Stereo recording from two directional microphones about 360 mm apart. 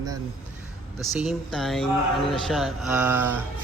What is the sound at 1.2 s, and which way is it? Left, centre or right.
A man's voice, centre.